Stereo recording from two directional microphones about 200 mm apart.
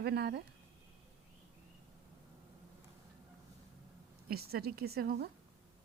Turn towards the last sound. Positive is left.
turn(degrees=-50)  # may be behind; listen again after turning